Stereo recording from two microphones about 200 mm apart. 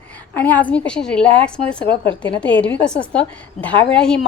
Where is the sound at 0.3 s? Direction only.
10° left (ahead or behind).